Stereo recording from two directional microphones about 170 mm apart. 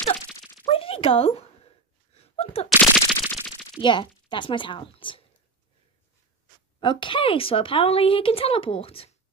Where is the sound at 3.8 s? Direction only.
30° left (ahead or behind).